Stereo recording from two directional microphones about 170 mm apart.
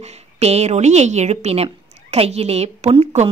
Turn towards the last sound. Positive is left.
turn(degrees=-40)  # may be behind; listen again after turning